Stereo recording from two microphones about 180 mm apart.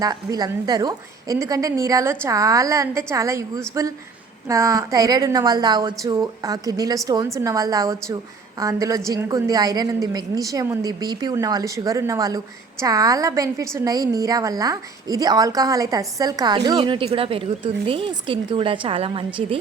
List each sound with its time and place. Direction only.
0.0 s a woman's voice: 20° right (ahead or behind)